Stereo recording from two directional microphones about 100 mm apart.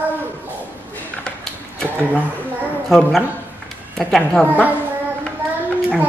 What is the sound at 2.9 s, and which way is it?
A woman's voice, centre (ahead or behind).